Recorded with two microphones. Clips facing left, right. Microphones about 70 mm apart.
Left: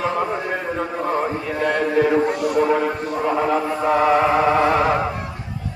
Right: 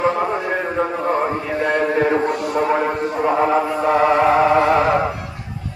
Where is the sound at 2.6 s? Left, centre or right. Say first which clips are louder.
Right 1 dB; right.